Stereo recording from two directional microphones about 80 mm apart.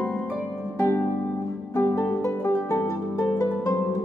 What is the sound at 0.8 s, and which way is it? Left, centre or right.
Harp, left.